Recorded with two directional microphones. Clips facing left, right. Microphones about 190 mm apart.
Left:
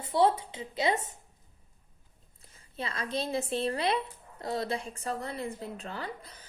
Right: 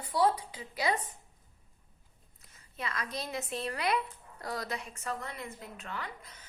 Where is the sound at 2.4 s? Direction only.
30° left (ahead or behind).